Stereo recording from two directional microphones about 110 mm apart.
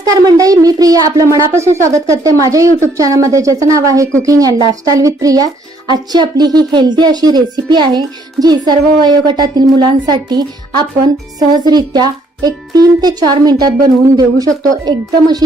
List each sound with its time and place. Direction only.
0.0 s speech: 30° right (ahead or behind)